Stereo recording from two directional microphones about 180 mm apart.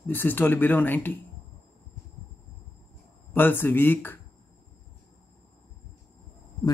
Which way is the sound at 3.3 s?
10° left (ahead or behind).